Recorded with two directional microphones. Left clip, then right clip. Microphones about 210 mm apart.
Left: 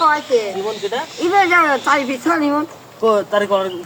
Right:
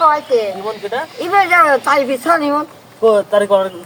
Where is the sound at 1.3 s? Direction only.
35° right (ahead or behind).